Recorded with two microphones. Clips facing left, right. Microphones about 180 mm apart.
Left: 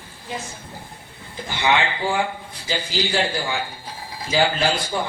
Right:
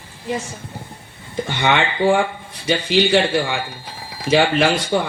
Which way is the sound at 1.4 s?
75° right (ahead or behind).